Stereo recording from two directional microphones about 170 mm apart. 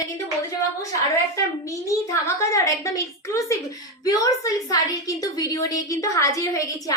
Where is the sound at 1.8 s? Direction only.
15° left (ahead or behind).